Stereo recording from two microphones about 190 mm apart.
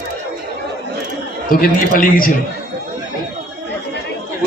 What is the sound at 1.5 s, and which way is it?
Speech, 45° left (ahead or behind).